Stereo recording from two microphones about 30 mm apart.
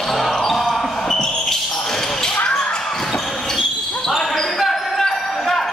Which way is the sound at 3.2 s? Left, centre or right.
Centre.